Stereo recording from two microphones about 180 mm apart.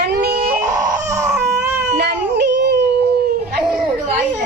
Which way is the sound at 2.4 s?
70° right (ahead or behind).